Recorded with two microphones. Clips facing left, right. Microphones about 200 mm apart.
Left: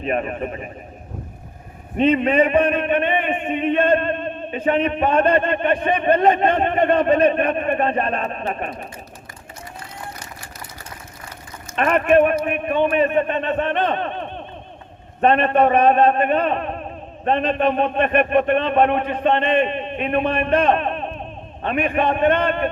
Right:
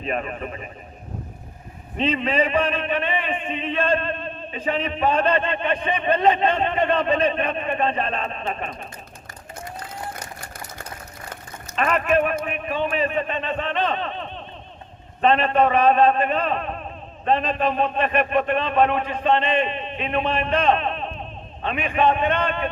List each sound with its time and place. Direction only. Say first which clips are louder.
0.0 s a man's voice: left 4 dB; 45° left (ahead or behind)
2.0 s a man's voice: left 6 dB; 50° left (ahead or behind)
10.4 s a sound: right 1 dB; 40° right (ahead or behind)
11.8 s a man's voice: left 5 dB; 50° left (ahead or behind)